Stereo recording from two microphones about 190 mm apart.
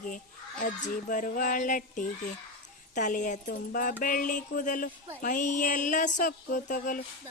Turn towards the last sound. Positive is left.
turn(degrees=45)  # may be behind; listen again after turning